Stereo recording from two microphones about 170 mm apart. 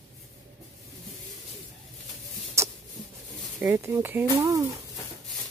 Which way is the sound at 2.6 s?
15° right (ahead or behind).